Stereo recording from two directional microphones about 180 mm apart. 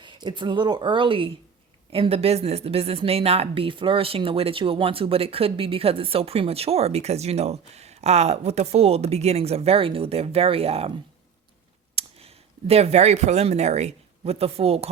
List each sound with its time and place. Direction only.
0.0 s a woman's voice: 25° right (ahead or behind)
11.9 s speech: 35° right (ahead or behind)